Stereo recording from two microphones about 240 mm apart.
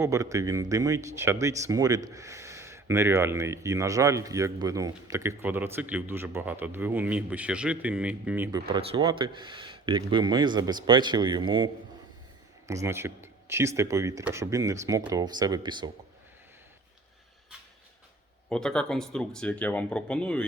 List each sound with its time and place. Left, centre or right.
0.0 s speech: centre
8.7 s speech: right
18.4 s speech: centre